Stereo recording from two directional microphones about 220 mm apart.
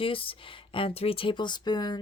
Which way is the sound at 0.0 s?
25° left (ahead or behind).